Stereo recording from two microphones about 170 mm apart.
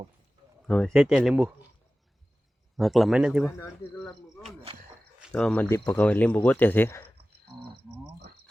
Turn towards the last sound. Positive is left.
turn(degrees=15)  # may be behind; listen again after turning